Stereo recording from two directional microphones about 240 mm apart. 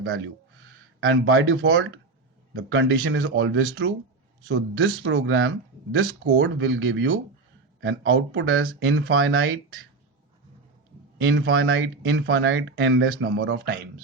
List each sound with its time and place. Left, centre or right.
0.9 s speech: right
11.2 s speech: right